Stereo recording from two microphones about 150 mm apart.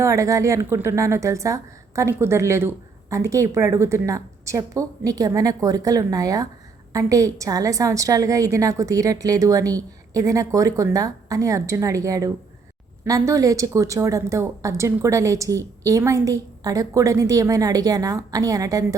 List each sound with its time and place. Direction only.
0.0 s a woman's voice: 20° right (ahead or behind)